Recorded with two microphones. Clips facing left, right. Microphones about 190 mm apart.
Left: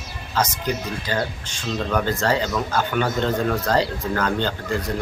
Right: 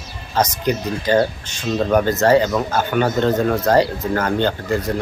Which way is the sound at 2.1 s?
50° right (ahead or behind).